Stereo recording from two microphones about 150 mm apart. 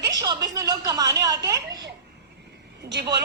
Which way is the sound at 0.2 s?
25° right (ahead or behind).